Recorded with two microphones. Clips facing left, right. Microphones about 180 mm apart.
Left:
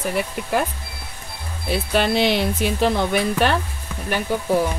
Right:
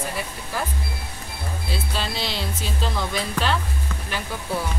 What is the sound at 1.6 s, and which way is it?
Speech, 65° left (ahead or behind).